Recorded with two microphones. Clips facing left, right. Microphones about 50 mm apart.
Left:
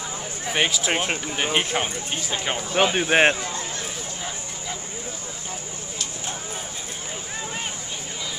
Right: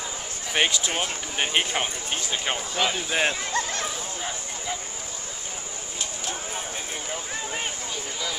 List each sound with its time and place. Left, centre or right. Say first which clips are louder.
0.6 s speech: left 1 dB; centre
2.7 s speech: left 9 dB; left